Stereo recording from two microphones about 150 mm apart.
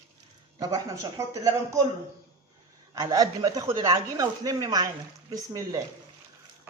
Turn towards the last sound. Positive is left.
turn(degrees=-20)  # may be behind; listen again after turning